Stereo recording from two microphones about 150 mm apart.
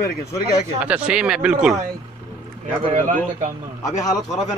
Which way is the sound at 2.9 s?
60° right (ahead or behind).